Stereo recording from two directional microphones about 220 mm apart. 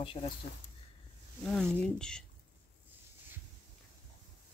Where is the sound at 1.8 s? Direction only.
5° left (ahead or behind).